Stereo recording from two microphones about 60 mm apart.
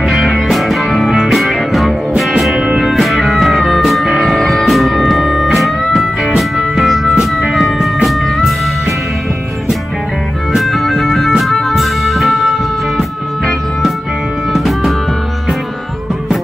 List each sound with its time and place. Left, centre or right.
0.0 s music: centre
2.5 s music: centre
2.8 s music: centre
10.5 s music: centre
14.5 s music: centre